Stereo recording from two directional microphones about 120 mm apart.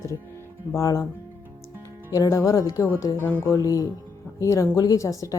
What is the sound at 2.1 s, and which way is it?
Speech, 30° left (ahead or behind).